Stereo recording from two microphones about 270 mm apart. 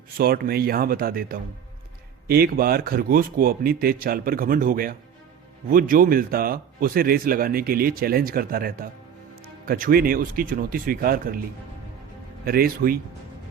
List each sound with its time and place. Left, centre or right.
0.2 s speech: right
12.5 s speech: right